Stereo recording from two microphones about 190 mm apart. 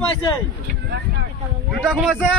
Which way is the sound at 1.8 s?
5° right (ahead or behind).